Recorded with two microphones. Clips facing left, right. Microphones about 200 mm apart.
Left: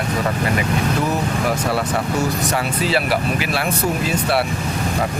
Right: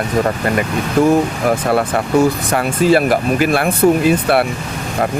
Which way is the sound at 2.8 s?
50° right (ahead or behind).